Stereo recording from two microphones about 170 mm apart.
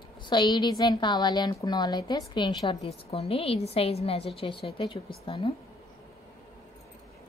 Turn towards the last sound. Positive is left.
turn(degrees=30)  # may be behind; listen again after turning